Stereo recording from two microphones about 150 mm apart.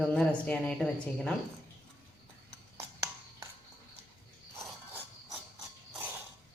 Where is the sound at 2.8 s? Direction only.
20° right (ahead or behind).